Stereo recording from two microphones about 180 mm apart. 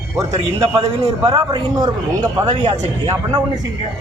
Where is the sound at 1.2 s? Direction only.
25° right (ahead or behind).